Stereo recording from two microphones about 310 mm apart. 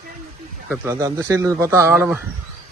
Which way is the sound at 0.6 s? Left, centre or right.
Centre.